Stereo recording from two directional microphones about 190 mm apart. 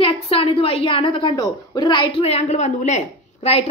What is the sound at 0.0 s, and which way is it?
A woman's voice, 30° left (ahead or behind).